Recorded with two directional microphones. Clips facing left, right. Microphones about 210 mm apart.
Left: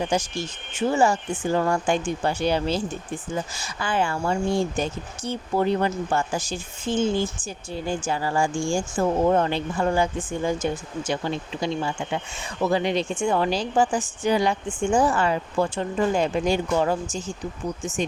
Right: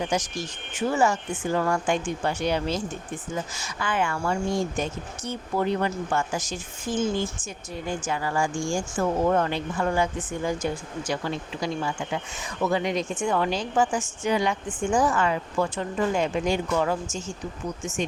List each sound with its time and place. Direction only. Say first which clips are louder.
0.1 s speech: left 2 dB; 30° left (ahead or behind)